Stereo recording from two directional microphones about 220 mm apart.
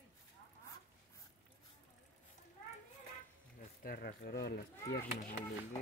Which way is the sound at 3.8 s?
40° left (ahead or behind).